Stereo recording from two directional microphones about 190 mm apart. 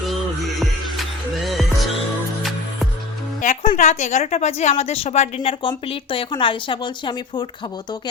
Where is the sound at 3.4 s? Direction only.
35° left (ahead or behind).